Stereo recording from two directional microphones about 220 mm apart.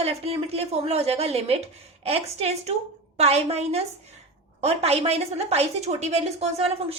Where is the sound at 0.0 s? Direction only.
25° right (ahead or behind).